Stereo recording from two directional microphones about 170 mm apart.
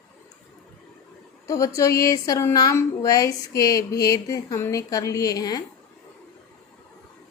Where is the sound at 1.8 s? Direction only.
20° left (ahead or behind).